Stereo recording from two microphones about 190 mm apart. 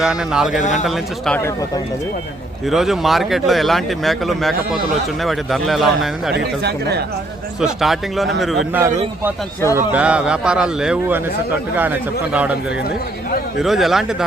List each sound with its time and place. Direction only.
0.0 s speech: 5° right (ahead or behind)
0.6 s speech: 40° left (ahead or behind)
0.9 s speech: centre (ahead or behind)
2.6 s speech: centre (ahead or behind)
6.3 s speech: 60° right (ahead or behind)
7.6 s a man's voice: centre (ahead or behind)
13.6 s speech: centre (ahead or behind)